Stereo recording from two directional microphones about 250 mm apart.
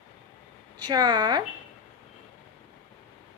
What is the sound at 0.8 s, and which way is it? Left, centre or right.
Speech, centre.